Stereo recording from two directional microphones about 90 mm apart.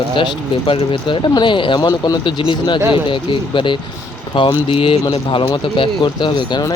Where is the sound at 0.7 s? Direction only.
75° left (ahead or behind); by 6.6 s 60° left (ahead or behind).